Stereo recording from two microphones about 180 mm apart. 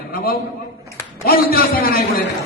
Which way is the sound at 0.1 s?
55° left (ahead or behind).